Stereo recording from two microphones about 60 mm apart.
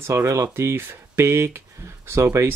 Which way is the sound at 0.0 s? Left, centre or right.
Right.